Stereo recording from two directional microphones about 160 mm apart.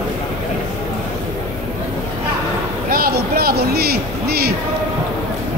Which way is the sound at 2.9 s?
70° right (ahead or behind).